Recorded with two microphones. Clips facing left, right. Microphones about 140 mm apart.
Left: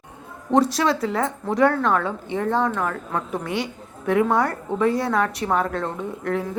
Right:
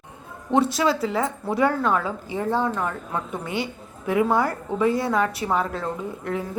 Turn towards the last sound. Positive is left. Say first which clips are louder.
# left 3 dB
turn(degrees=0)  # may be behind; listen again after turning